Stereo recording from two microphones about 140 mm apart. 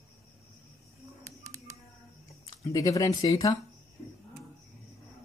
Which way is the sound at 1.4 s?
25° right (ahead or behind).